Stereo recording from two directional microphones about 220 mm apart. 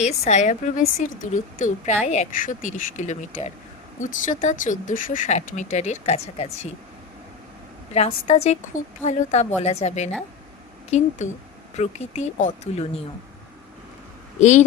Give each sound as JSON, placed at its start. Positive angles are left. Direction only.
{"t": 0.0, "sound": "a woman's voice", "side_deg": 30}
{"t": 7.9, "sound": "a woman's voice", "side_deg": 30}
{"t": 11.8, "sound": "a woman's voice", "side_deg": 30}